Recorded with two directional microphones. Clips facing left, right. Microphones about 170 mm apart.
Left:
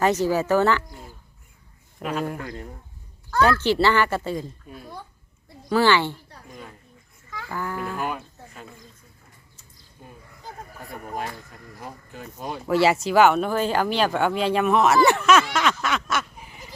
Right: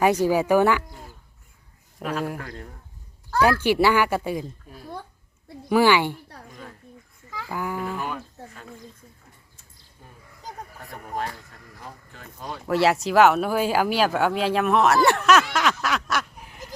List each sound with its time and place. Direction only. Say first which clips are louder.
0.0 s speech: right 1 dB; 10° right (ahead or behind)
2.0 s speech: left 1 dB; centre (ahead or behind)
3.3 s speech: even; 10° right (ahead or behind)
5.6 s speech: right 1 dB; 15° right (ahead or behind)
7.4 s speech: right 1 dB; 10° right (ahead or behind)
7.9 s speech: left 2 dB; 10° left (ahead or behind)
11.8 s speech: left 4 dB; 15° left (ahead or behind)
12.6 s speech: left 1 dB; centre (ahead or behind)